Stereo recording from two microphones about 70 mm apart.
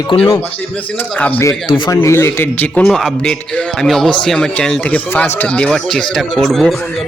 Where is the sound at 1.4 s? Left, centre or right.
Left.